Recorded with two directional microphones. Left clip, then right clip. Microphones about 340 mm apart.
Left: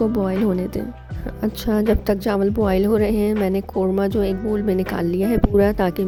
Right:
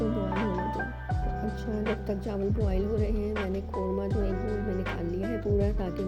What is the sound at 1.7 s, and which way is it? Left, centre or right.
Speech, left.